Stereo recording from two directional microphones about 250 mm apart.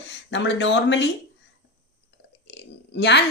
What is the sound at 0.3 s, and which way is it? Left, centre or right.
Speech, left.